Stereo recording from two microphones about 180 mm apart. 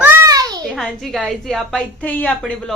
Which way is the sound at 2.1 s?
10° left (ahead or behind).